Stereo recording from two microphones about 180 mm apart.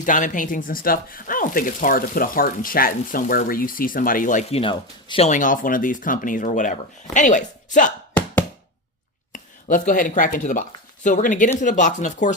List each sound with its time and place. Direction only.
0.0 s speech: 45° left (ahead or behind)
4.6 s speech: 30° left (ahead or behind)
5.3 s speech: 45° left (ahead or behind)
9.3 s speech: 45° left (ahead or behind)